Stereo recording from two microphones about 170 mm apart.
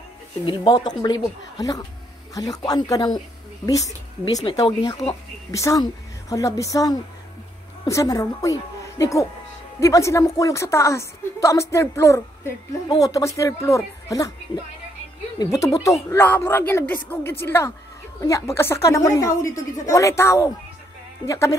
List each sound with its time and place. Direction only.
0.5 s a woman's voice: 25° left (ahead or behind)
5.5 s a woman's voice: 20° left (ahead or behind)